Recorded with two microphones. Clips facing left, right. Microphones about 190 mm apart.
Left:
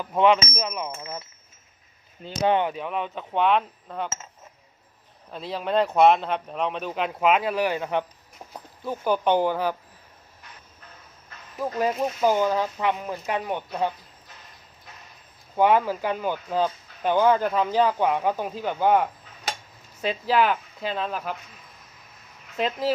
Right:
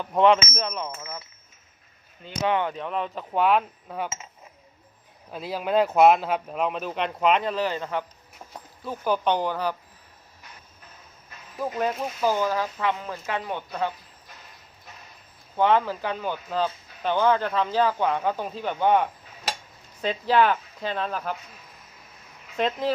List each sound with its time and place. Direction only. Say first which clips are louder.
0.0 s speech: right 1 dB; centre (ahead or behind); by 1.1 s 20° left (ahead or behind)
2.2 s speech: left 3 dB; 35° left (ahead or behind)
2.7 s speech: even; 5° left (ahead or behind)
5.3 s speech: right 1 dB; 5° right (ahead or behind); by 9.7 s 15° left (ahead or behind)
11.6 s speech: left 2 dB; centre (ahead or behind)
12.2 s speech: left 2 dB; 15° left (ahead or behind)
15.5 s speech: left 1 dB; 10° left (ahead or behind)
22.5 s speech: right 1 dB; 5° left (ahead or behind)